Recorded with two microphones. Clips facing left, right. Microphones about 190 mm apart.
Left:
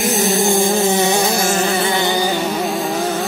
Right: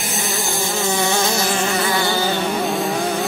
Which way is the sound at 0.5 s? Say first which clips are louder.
Left 8 dB; 50° left (ahead or behind).